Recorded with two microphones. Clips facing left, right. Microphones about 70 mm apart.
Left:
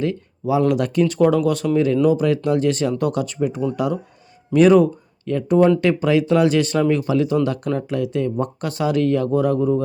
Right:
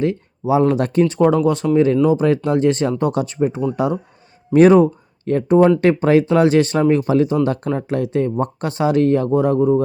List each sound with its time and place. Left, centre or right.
0.0 s speech: right